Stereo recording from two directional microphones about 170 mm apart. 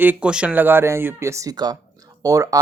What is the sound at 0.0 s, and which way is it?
Speech, 10° right (ahead or behind).